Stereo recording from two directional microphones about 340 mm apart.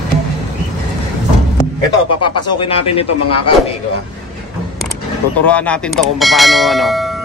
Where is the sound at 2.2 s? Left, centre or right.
Centre.